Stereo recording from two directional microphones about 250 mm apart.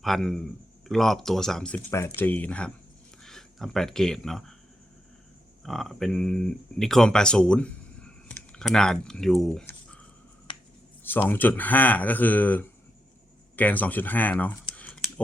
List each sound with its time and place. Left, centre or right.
0.0 s speech: centre
5.6 s speech: centre
11.0 s speech: centre